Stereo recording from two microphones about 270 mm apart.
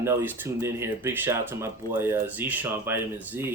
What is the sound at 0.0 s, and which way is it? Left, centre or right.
Speech, centre.